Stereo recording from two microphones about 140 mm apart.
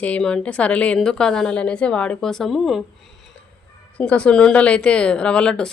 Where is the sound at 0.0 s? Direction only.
10° left (ahead or behind).